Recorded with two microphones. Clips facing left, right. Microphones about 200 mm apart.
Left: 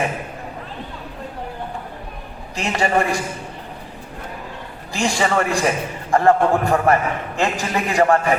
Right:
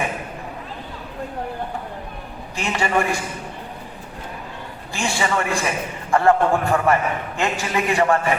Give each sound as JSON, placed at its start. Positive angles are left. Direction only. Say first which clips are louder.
{"t": 2.6, "sound": "a man's voice", "louder": "left 2 dB", "side_deg": 35}
{"t": 4.9, "sound": "a man's voice", "louder": "left 3 dB", "side_deg": 35}